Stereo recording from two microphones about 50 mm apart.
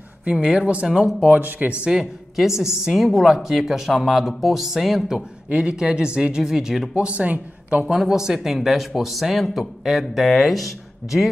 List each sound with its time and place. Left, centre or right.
0.2 s speech: right
0.8 s a woman's voice: centre
1.4 s speech: right
2.3 s a woman's voice: centre
7.0 s speech: right
8.0 s speech: centre